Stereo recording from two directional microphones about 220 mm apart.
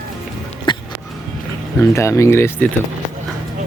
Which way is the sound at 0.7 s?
20° left (ahead or behind).